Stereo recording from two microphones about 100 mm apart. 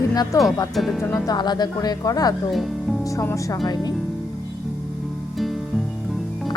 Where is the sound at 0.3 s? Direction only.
35° left (ahead or behind).